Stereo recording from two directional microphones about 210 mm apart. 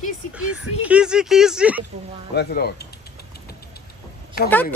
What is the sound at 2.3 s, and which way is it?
Speech, 50° left (ahead or behind).